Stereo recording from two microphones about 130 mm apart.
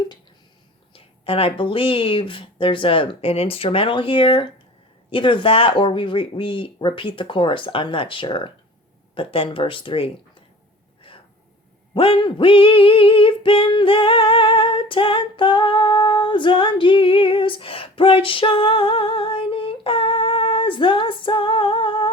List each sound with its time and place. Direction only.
0.9 s female singing: 45° left (ahead or behind)
5.1 s speech: 40° left (ahead or behind)
9.1 s female singing: 45° left (ahead or behind)
11.1 s a sound: 45° left (ahead or behind)
11.9 s female singing: 40° left (ahead or behind)